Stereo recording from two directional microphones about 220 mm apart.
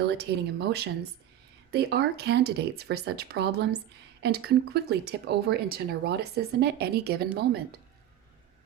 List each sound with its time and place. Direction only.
0.0 s speech: 50° right (ahead or behind)